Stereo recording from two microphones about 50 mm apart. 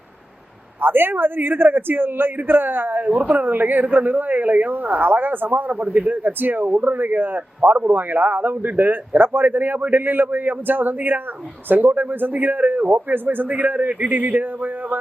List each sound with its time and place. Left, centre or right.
0.8 s a man's voice: right